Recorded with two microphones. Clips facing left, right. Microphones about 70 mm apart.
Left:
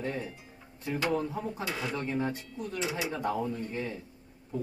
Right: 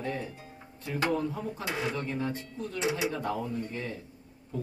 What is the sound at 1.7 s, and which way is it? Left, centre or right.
Speech, right.